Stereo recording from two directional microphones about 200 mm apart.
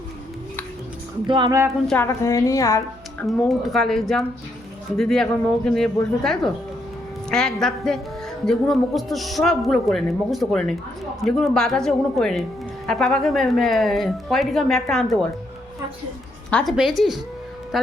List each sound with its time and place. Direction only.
1.3 s speech: 20° right (ahead or behind)
1.9 s a woman's voice: 10° left (ahead or behind)
3.2 s a man's voice: centre (ahead or behind)
16.5 s a man's voice: 5° left (ahead or behind)